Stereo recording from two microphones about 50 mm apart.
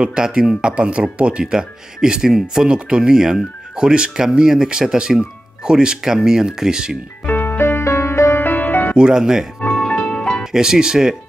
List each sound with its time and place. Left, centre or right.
0.0 s speech: centre
1.4 s speech: centre
7.2 s music: left
8.4 s music: left
8.9 s speech: centre
9.8 s music: centre
10.4 s speech: centre